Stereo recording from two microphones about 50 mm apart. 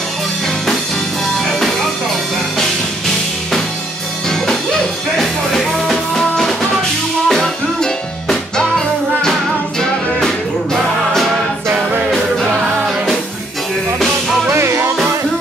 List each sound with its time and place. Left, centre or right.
1.4 s music: centre
5.1 s music: centre
14.5 s music: right